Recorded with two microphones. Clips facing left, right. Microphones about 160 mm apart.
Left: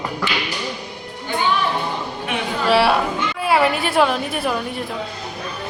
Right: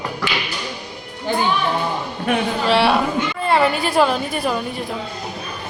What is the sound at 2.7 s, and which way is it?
A woman's voice, centre (ahead or behind).